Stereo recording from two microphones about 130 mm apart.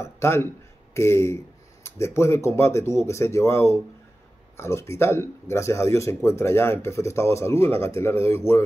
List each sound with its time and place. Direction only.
0.0 s speech: 20° left (ahead or behind)